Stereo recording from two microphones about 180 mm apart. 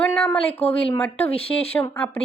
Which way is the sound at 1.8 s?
15° left (ahead or behind).